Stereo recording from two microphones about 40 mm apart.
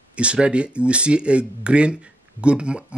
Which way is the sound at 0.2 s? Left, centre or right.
Right.